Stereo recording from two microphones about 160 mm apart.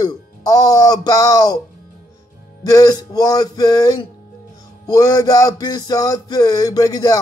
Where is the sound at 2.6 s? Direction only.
25° left (ahead or behind).